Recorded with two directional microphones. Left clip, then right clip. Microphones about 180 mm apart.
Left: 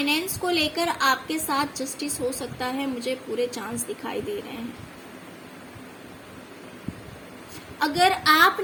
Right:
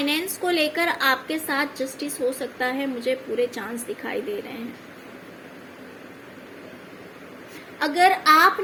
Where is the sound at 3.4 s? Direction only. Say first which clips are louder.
Right 1 dB; 10° left (ahead or behind).